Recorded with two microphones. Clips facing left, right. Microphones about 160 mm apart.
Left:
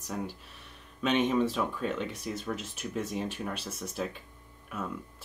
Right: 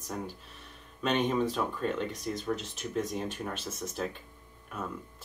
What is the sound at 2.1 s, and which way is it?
Speech, 40° right (ahead or behind).